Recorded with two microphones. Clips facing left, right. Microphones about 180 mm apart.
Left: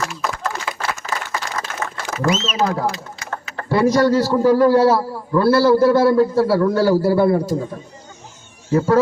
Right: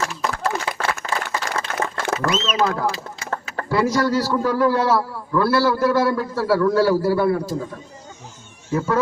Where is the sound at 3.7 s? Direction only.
25° left (ahead or behind).